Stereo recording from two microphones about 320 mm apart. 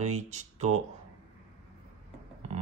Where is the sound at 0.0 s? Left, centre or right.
Right.